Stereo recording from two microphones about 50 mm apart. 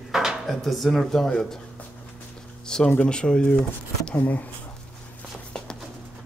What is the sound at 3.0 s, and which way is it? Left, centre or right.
Speech, centre.